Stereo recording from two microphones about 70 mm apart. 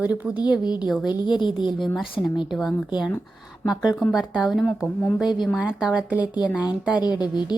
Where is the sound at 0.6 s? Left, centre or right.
Left.